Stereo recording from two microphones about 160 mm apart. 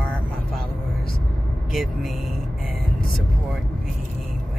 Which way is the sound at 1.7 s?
Centre (ahead or behind).